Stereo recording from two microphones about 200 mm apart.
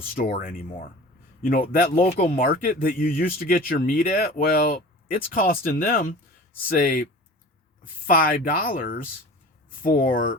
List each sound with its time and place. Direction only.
0.2 s speech: 45° left (ahead or behind)
8.0 s speech: 45° left (ahead or behind)